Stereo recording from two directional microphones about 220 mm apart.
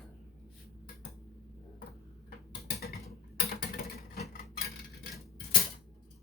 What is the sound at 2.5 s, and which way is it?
Mechanisms, 45° left (ahead or behind).